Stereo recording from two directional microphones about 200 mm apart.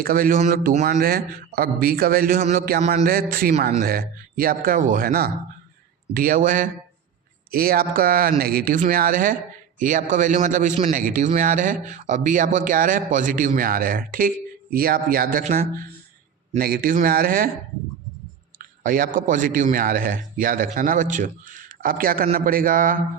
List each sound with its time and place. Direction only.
0.0 s speech: 45° right (ahead or behind)
18.6 s speech: 45° right (ahead or behind)